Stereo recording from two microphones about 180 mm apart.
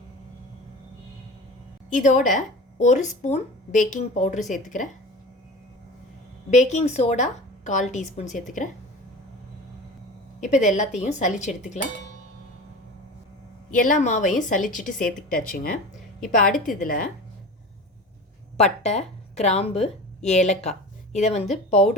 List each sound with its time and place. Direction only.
1.9 s a woman's voice: 45° left (ahead or behind)
6.5 s a woman's voice: 40° left (ahead or behind)
10.4 s a woman's voice: 40° left (ahead or behind)
13.7 s a woman's voice: 45° left (ahead or behind)
18.5 s a woman's voice: 40° left (ahead or behind)